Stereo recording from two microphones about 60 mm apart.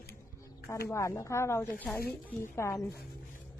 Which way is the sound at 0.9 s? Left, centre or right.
Left.